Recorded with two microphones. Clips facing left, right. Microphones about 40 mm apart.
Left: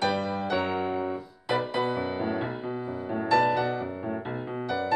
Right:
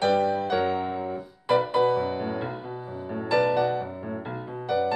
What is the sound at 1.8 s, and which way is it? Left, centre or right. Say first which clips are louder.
Music: right 4 dB; centre.